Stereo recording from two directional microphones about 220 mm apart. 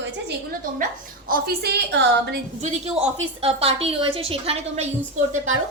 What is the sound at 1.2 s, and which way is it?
A woman's voice, 40° right (ahead or behind).